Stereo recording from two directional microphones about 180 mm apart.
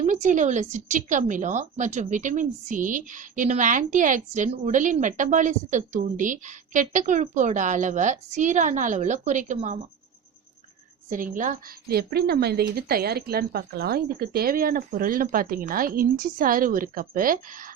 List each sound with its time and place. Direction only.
0.0 s a woman's voice: 40° right (ahead or behind)
11.3 s a woman's voice: 55° right (ahead or behind)